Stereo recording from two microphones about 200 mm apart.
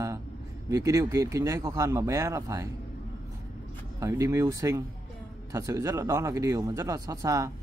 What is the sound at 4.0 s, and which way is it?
Speech, 15° right (ahead or behind).